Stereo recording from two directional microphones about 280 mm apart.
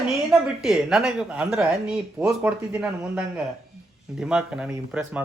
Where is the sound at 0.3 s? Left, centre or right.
Centre.